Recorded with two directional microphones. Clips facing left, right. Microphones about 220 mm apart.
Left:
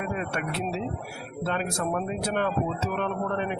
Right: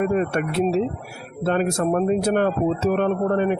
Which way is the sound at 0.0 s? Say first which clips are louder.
Right 10 dB; 45° right (ahead or behind).